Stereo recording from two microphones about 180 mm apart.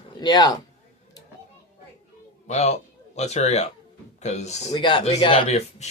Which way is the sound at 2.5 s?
40° left (ahead or behind).